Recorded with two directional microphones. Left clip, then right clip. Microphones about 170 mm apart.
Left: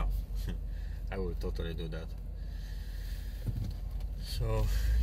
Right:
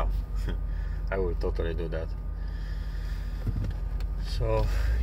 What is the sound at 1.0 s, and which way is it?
Speech, 15° left (ahead or behind).